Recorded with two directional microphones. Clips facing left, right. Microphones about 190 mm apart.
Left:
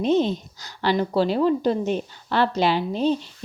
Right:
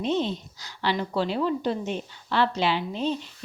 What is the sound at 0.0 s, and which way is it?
A woman's voice, 45° left (ahead or behind).